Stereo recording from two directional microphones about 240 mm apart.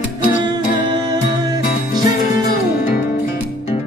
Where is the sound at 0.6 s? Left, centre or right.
Left.